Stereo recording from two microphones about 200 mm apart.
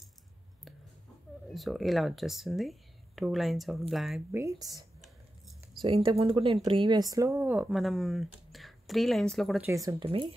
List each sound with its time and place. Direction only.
1.5 s speech: centre (ahead or behind)
4.4 s speech: 15° right (ahead or behind); by 9.7 s centre (ahead or behind)
9.7 s speech: 15° right (ahead or behind)